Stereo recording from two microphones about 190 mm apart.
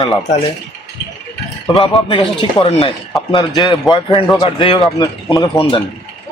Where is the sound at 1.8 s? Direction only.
30° left (ahead or behind).